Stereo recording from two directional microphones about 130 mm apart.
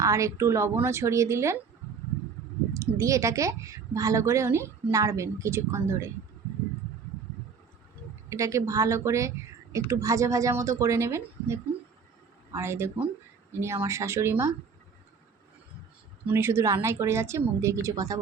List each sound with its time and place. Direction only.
0.0 s a woman's voice: 25° right (ahead or behind)
2.7 s a woman's voice: 25° right (ahead or behind)
8.3 s a woman's voice: 25° right (ahead or behind)
16.2 s a woman's voice: 20° right (ahead or behind)